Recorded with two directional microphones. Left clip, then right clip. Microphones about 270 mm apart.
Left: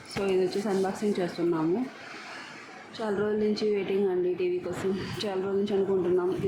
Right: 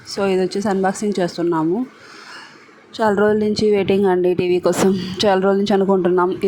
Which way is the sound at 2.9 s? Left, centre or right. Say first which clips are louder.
Right 13 dB; right.